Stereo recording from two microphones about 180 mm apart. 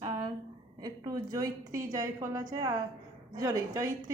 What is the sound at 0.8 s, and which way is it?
A woman's voice, 20° right (ahead or behind).